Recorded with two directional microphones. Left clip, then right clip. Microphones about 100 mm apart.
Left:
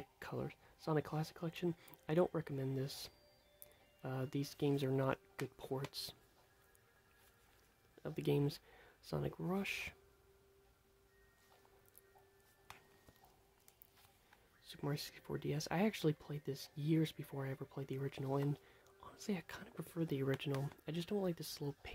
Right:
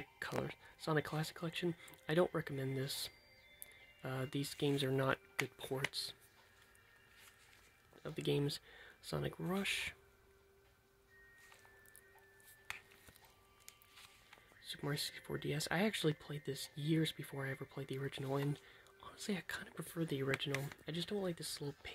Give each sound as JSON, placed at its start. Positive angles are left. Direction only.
{"t": 0.8, "sound": "speech", "side_deg": 30}
{"t": 4.6, "sound": "speech", "side_deg": 30}
{"t": 8.0, "sound": "speech", "side_deg": 50}
{"t": 14.7, "sound": "speech", "side_deg": 30}
{"t": 15.5, "sound": "speech", "side_deg": 40}
{"t": 20.5, "sound": "speech", "side_deg": 25}
{"t": 20.8, "sound": "speech", "side_deg": 55}